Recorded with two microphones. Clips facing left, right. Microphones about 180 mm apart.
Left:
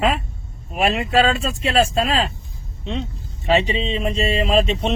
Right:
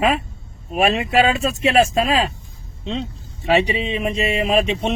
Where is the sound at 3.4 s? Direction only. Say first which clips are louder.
Right 1 dB; 15° right (ahead or behind).